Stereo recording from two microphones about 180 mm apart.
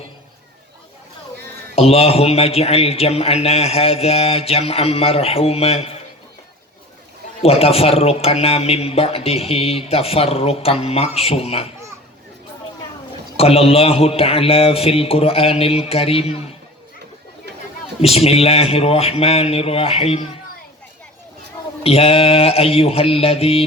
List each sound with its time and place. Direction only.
1.7 s a man's voice: 35° left (ahead or behind)
7.4 s a man's voice: 35° left (ahead or behind)
13.3 s a man's voice: 35° left (ahead or behind)
18.0 s a man's voice: 35° left (ahead or behind)
21.8 s a man's voice: 30° left (ahead or behind)